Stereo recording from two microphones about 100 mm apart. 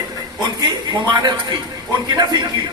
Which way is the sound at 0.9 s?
45° right (ahead or behind).